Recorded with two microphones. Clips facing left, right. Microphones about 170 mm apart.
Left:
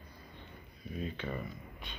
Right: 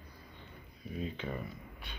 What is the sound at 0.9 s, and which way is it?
Speech, 15° right (ahead or behind).